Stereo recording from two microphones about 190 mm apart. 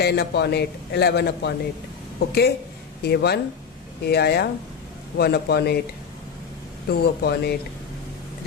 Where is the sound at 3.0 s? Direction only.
60° left (ahead or behind).